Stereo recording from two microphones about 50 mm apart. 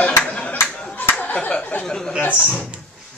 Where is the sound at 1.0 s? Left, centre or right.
Left.